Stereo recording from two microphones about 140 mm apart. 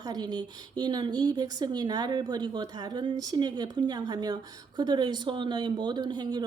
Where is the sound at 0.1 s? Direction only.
30° right (ahead or behind).